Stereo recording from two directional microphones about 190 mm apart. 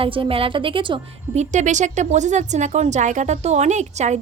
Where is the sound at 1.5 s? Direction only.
40° right (ahead or behind).